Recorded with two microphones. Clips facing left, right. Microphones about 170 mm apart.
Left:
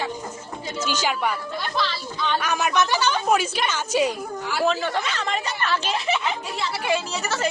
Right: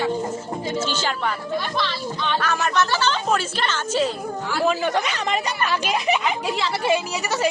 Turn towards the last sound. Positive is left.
turn(degrees=-15)  # may be behind; listen again after turning